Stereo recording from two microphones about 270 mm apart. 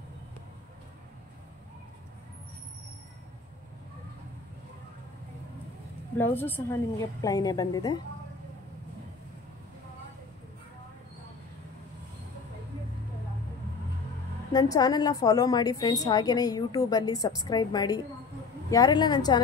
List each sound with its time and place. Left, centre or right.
6.1 s a woman's voice: centre
14.5 s a woman's voice: centre